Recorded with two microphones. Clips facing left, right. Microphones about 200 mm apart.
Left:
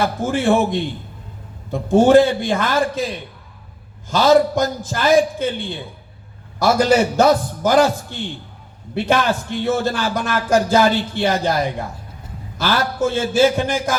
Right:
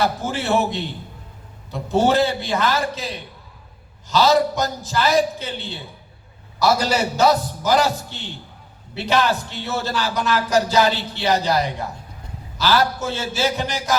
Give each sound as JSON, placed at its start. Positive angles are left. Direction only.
{"t": 0.0, "sound": "speech", "side_deg": 50}
{"t": 4.1, "sound": "speech", "side_deg": 50}